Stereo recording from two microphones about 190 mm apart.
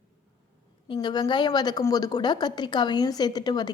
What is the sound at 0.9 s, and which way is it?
A woman's voice, 20° left (ahead or behind).